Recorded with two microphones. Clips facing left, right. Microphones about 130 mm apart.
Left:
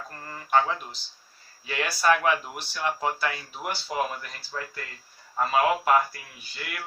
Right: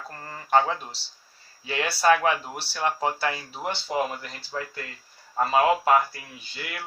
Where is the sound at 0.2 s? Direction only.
30° right (ahead or behind).